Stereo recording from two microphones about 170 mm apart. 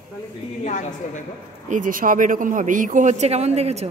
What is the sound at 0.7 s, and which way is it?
Speech, 45° left (ahead or behind).